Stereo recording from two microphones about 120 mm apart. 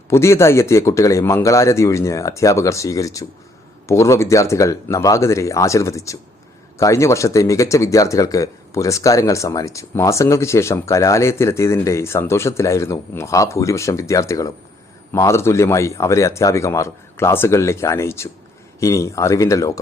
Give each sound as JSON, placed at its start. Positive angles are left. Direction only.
{"t": 0.1, "sound": "speech", "side_deg": 25}